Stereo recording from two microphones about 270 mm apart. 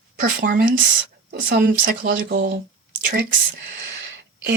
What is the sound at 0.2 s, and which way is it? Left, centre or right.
Speech, right.